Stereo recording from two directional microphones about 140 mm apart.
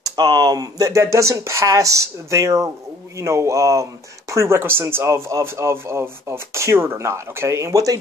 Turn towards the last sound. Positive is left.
turn(degrees=-25)  # may be behind; listen again after turning